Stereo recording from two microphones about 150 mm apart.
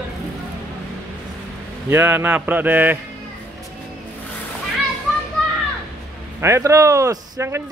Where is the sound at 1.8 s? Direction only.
15° right (ahead or behind).